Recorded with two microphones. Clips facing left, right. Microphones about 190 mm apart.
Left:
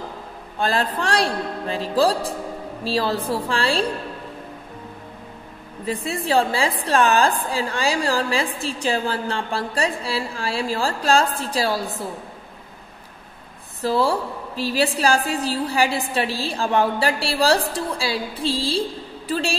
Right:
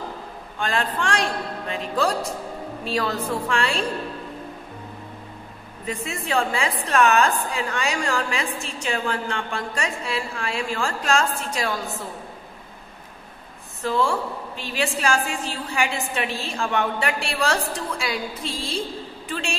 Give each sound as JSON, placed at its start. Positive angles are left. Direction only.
{"t": 0.6, "sound": "a woman's voice", "side_deg": 35}
{"t": 5.9, "sound": "a woman's voice", "side_deg": 35}
{"t": 13.8, "sound": "a woman's voice", "side_deg": 35}